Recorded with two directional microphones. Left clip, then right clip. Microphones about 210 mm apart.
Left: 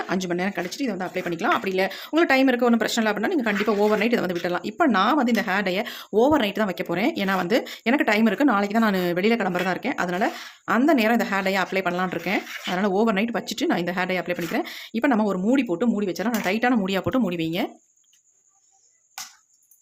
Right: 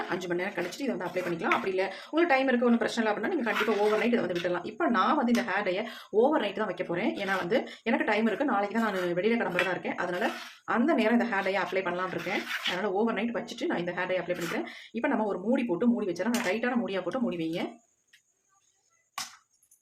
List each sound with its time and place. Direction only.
0.1 s speech: 45° left (ahead or behind)